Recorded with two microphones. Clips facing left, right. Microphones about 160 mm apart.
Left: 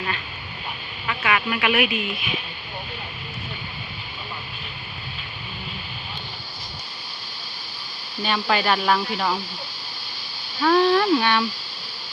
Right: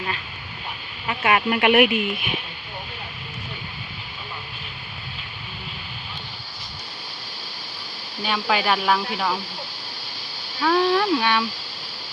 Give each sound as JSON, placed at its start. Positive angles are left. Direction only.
{"t": 1.0, "sound": "speech", "side_deg": -40}
{"t": 8.2, "sound": "speech", "side_deg": -10}
{"t": 10.6, "sound": "a sound", "side_deg": 0}